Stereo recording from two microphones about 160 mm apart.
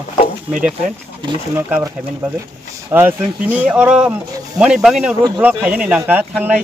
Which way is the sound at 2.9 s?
10° right (ahead or behind).